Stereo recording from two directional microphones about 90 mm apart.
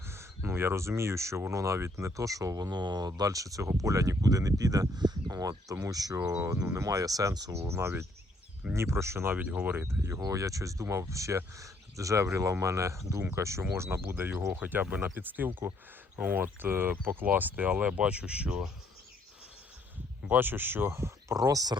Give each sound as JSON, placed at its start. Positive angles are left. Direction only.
{"t": 0.0, "sound": "speech", "side_deg": -30}
{"t": 3.2, "sound": "speech", "side_deg": -40}
{"t": 6.4, "sound": "speech", "side_deg": -30}
{"t": 7.7, "sound": "speech", "side_deg": -30}
{"t": 10.2, "sound": "speech", "side_deg": -40}
{"t": 20.2, "sound": "speech", "side_deg": -20}
{"t": 21.3, "sound": "speech", "side_deg": -40}